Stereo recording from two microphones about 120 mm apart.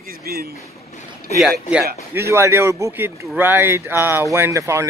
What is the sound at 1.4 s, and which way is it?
Speech, 5° right (ahead or behind).